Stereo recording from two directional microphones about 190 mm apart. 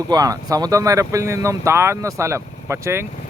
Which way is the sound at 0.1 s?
20° right (ahead or behind).